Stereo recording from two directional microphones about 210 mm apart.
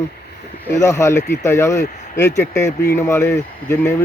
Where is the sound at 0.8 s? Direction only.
15° left (ahead or behind).